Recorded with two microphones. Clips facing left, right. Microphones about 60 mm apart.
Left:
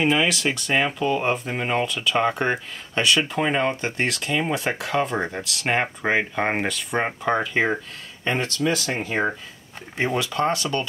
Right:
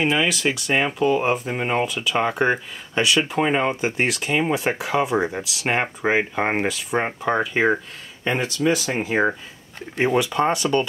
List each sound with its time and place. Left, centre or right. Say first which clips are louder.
0.0 s speech: even; centre